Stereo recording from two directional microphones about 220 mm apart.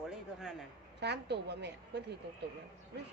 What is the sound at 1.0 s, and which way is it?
A woman's voice, 50° right (ahead or behind).